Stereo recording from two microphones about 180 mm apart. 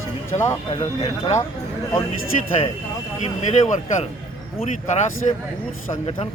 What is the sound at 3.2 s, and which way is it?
Speech, 40° left (ahead or behind).